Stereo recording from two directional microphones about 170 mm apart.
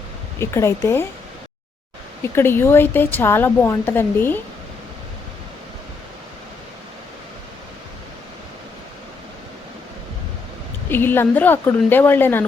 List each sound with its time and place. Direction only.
0.3 s a woman's voice: 15° left (ahead or behind)
2.2 s a woman's voice: 15° left (ahead or behind)
10.8 s a woman's voice: 10° left (ahead or behind)